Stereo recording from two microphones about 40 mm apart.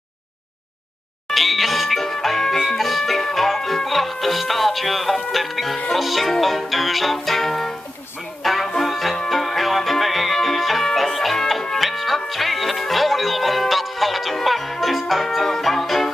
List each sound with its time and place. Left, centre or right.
1.3 s music: centre